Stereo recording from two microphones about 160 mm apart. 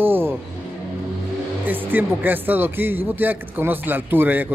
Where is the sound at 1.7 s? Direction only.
10° right (ahead or behind).